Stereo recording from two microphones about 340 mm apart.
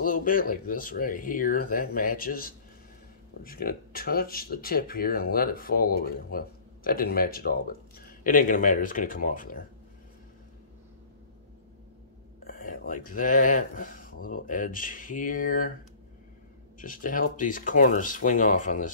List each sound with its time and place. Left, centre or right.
0.0 s speech: left
12.4 s speech: left
16.8 s speech: left